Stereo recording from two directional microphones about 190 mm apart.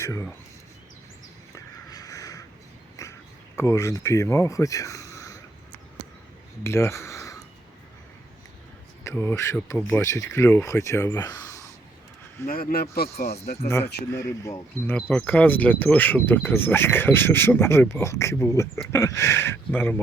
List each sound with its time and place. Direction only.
0.0 s speech: 15° left (ahead or behind)
1.5 s crow: 15° left (ahead or behind)
3.0 s a sound: 15° left (ahead or behind)
6.6 s speech: 15° left (ahead or behind)
9.0 s speech: 15° left (ahead or behind)
12.5 s speech: 50° left (ahead or behind)
13.3 s speech: 35° left (ahead or behind)
14.1 s speech: 15° left (ahead or behind)